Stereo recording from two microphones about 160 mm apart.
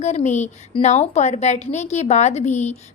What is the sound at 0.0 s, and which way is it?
A woman's voice, 45° left (ahead or behind).